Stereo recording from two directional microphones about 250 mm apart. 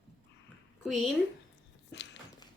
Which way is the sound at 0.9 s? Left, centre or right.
Centre.